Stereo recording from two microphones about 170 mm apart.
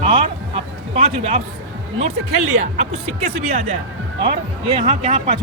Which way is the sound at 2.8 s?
40° right (ahead or behind).